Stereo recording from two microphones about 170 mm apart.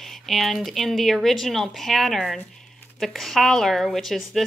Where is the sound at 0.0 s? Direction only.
Centre (ahead or behind).